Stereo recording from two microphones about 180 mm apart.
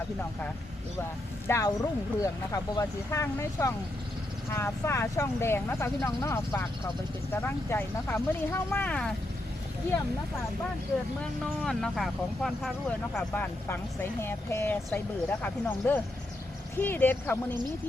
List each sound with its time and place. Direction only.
1.5 s speech: 15° left (ahead or behind)
11.2 s speech: 5° left (ahead or behind)
13.1 s speech: 10° left (ahead or behind)